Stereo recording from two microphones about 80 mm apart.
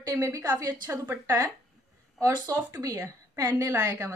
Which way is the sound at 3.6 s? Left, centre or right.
Right.